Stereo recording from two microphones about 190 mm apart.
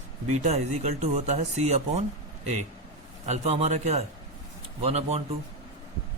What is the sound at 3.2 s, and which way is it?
A man's voice, 35° right (ahead or behind).